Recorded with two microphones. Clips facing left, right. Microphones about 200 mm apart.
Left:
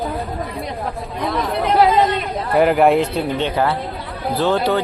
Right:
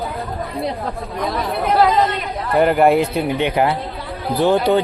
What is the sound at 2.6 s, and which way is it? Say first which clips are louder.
Speech: even; centre (ahead or behind).